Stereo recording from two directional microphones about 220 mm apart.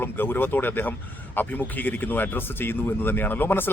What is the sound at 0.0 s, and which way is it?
A man's voice, 10° left (ahead or behind).